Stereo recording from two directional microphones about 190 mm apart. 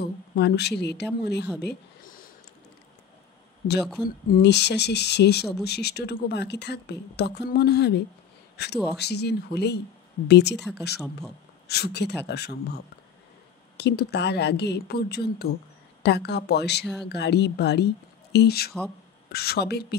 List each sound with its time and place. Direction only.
0.0 s speech: 60° left (ahead or behind)
1.6 s a sound: 55° left (ahead or behind)
4.3 s speech: 60° left (ahead or behind)
11.0 s speech: 5° left (ahead or behind)
11.6 s speech: 60° left (ahead or behind)